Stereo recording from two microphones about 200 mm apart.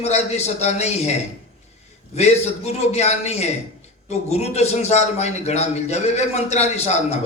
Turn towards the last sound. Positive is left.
turn(degrees=35)  # may be behind; listen again after turning